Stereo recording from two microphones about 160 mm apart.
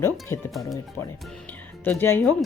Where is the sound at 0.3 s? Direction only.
20° left (ahead or behind).